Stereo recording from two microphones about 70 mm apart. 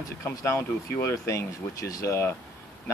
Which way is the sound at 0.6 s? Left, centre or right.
Left.